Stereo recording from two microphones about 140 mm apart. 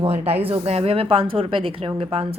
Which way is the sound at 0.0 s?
45° right (ahead or behind).